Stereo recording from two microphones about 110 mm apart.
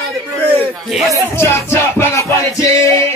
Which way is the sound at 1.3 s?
25° left (ahead or behind).